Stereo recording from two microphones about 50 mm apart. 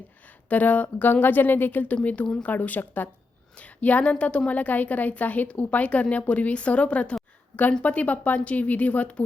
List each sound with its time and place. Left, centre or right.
0.5 s a woman's voice: left